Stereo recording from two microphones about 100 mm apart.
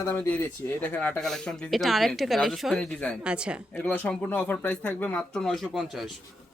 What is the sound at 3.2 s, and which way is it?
Speech, 10° right (ahead or behind).